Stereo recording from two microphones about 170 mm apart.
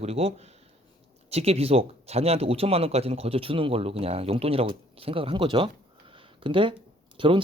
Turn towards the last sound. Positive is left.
turn(degrees=-30)  # may be behind; listen again after turning